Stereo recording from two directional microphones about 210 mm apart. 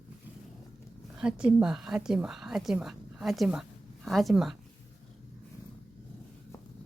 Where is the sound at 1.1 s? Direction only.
5° right (ahead or behind).